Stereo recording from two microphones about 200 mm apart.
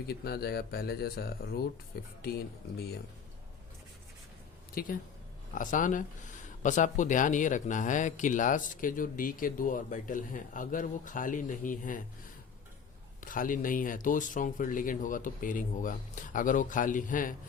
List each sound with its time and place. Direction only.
0.1 s speech: 50° left (ahead or behind)
4.7 s speech: 45° left (ahead or behind)
13.2 s speech: 40° left (ahead or behind)